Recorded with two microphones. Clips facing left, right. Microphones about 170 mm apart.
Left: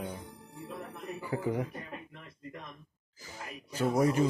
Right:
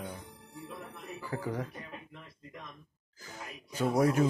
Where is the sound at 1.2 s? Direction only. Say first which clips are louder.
Left 3 dB; 20° left (ahead or behind).